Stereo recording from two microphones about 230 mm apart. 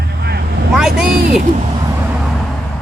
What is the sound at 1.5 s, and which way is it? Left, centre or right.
Vehicle, right.